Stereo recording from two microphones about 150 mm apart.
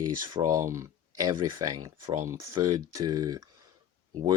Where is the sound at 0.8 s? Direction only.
20° right (ahead or behind).